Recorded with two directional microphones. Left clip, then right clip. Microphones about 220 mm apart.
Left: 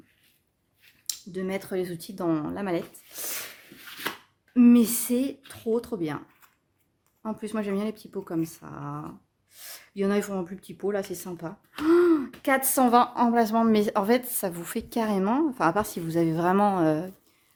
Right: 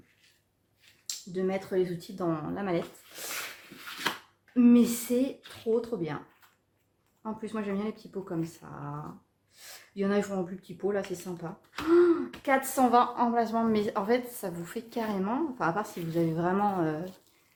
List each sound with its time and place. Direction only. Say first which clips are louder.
1.0 s speech: right 1 dB; 50° left (ahead or behind)
4.5 s speech: left 3 dB; 50° left (ahead or behind)